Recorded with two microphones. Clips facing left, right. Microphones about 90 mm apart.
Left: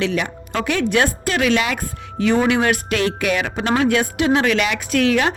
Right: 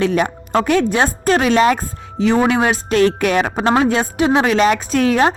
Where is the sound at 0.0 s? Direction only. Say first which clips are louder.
Right 5 dB; 40° right (ahead or behind).